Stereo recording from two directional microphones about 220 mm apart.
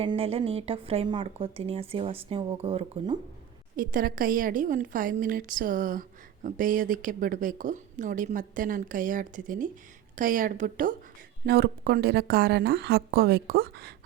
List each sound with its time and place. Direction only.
0.0 s a woman's voice: 25° right (ahead or behind)
3.8 s a woman's voice: 40° right (ahead or behind)